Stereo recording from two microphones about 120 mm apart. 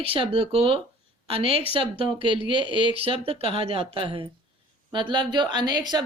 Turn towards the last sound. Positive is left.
turn(degrees=-35)  # may be behind; listen again after turning